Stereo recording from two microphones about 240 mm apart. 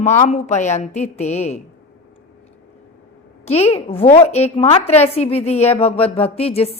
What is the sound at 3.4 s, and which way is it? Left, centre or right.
A woman's voice, left.